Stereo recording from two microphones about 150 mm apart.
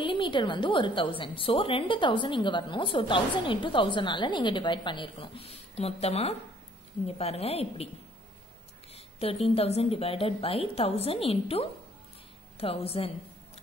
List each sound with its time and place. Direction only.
0.0 s a woman's voice: 35° left (ahead or behind)
8.9 s a woman's voice: 40° left (ahead or behind)